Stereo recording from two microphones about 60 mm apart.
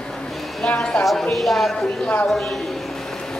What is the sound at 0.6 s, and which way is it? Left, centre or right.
Speech, centre.